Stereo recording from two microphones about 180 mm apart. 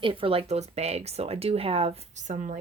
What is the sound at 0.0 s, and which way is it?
Speech, 30° right (ahead or behind).